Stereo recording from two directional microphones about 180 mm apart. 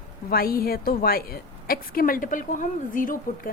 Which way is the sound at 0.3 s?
55° left (ahead or behind).